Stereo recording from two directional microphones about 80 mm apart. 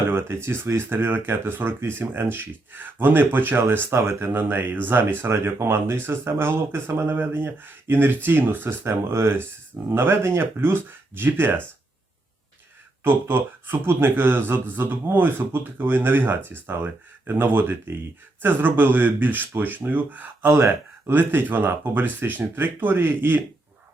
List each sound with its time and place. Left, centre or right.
0.1 s speech: right
3.9 s speech: right
4.3 s speech: right
13.1 s speech: right